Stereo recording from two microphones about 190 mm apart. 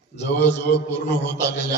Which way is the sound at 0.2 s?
65° left (ahead or behind).